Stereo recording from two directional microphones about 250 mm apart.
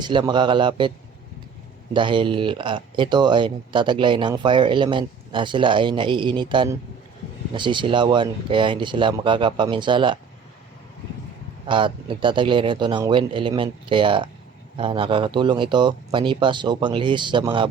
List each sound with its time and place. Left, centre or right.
0.0 s speech: centre
11.7 s speech: centre